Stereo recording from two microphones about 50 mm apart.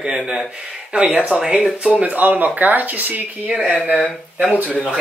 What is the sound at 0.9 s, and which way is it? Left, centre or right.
Speech, right.